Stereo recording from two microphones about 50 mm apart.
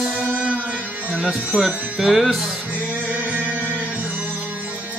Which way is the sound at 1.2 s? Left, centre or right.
Centre.